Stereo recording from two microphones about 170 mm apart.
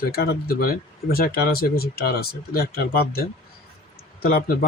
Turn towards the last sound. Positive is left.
turn(degrees=60)  # may be behind; listen again after turning